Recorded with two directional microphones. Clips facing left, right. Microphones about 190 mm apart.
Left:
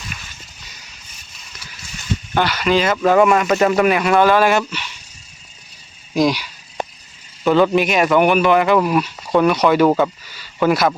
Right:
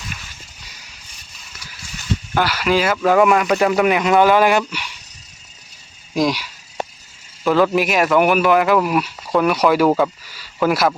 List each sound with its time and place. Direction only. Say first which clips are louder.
2.3 s speech: left 1 dB; 5° right (ahead or behind)
3.8 s speech: even; 15° right (ahead or behind)
6.1 s speech: left 2 dB; centre (ahead or behind)